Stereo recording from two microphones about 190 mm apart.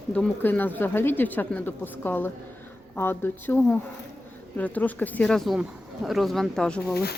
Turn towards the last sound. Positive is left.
turn(degrees=5)  # may be behind; listen again after turning